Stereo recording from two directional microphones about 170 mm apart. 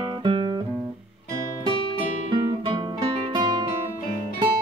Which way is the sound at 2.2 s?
30° right (ahead or behind).